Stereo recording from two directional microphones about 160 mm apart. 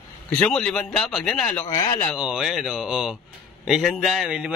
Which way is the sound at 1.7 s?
25° left (ahead or behind).